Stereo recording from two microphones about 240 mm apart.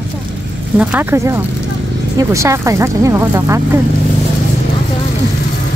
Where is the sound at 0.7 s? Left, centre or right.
Centre.